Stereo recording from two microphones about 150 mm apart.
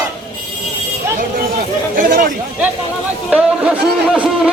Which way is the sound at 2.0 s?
70° right (ahead or behind).